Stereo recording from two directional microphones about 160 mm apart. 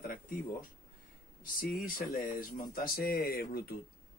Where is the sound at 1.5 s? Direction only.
65° left (ahead or behind).